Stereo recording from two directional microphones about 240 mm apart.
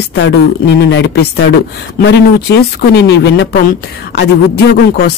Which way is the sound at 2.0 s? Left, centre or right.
Left.